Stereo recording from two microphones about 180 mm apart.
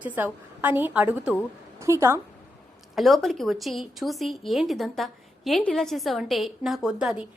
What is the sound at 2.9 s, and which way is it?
A woman's voice, centre (ahead or behind).